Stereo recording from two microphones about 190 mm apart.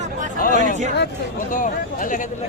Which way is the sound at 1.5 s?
45° left (ahead or behind).